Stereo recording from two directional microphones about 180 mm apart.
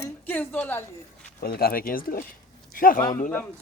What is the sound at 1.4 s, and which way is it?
Speech, 55° left (ahead or behind).